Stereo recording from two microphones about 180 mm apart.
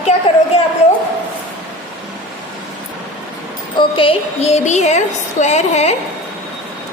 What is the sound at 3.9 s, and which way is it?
A woman's voice, 30° left (ahead or behind).